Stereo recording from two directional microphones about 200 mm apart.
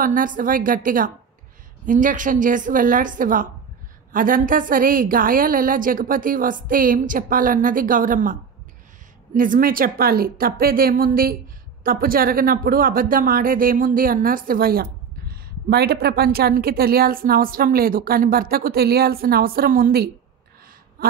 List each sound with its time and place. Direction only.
0.0 s a woman's voice: 40° right (ahead or behind)